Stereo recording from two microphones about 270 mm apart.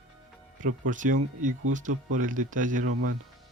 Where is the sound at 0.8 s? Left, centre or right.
Right.